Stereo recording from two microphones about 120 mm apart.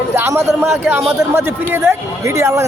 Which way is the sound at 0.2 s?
20° right (ahead or behind).